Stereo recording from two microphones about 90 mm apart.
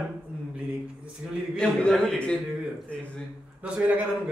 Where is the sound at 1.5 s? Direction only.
5° left (ahead or behind).